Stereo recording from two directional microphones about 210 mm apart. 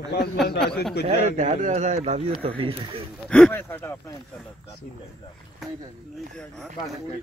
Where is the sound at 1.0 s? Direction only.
35° right (ahead or behind).